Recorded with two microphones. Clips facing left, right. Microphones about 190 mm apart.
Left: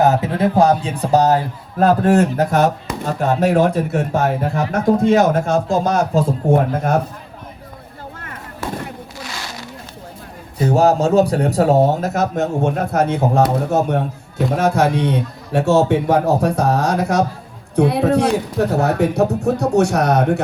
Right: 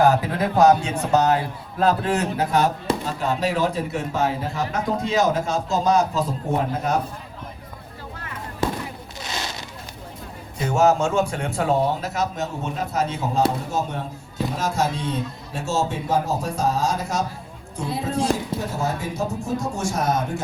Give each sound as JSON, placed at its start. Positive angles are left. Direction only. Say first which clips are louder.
{"t": 0.0, "sound": "speech", "louder": "left 3 dB", "side_deg": 25}
{"t": 1.8, "sound": "speech", "louder": "left 7 dB", "side_deg": 50}
{"t": 9.2, "sound": "a sound", "louder": "right 2 dB", "side_deg": -20}
{"t": 10.6, "sound": "speech", "louder": "left 4 dB", "side_deg": 35}